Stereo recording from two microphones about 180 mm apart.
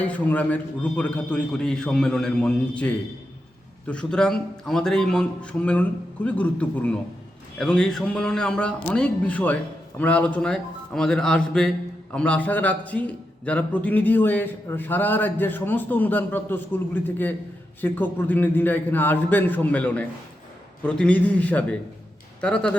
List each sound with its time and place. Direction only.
0.0 s a man's voice: 10° left (ahead or behind)